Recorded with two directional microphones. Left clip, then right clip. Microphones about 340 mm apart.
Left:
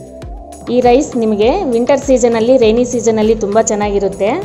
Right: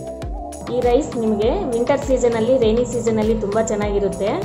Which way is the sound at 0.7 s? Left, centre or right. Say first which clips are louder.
Left 7 dB; left.